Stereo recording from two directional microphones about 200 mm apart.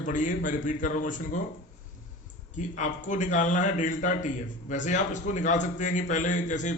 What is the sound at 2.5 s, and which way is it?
A man's voice, 40° left (ahead or behind).